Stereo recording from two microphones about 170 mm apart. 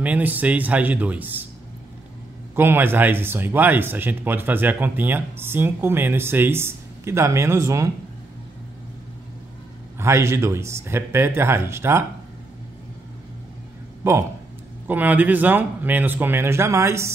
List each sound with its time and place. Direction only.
0.0 s speech: 10° right (ahead or behind)
2.5 s speech: 15° right (ahead or behind)
9.9 s speech: 15° right (ahead or behind)
14.0 s speech: 15° right (ahead or behind)